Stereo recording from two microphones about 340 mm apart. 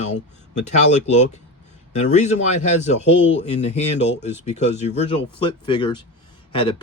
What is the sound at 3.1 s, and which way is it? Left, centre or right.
Speech, left.